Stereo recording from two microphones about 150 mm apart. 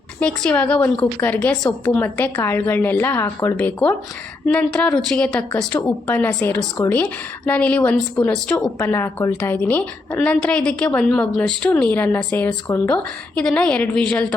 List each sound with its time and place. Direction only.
0.2 s speech: 10° left (ahead or behind)